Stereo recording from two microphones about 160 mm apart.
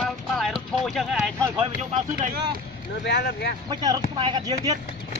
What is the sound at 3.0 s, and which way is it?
Speech, 90° left.